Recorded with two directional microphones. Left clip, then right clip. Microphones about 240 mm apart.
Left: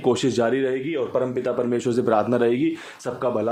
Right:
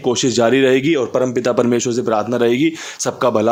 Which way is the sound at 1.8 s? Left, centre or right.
Centre.